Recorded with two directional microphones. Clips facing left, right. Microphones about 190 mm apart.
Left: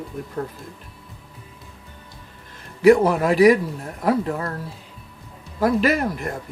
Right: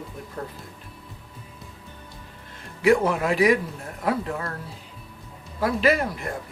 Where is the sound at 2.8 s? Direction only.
40° left (ahead or behind).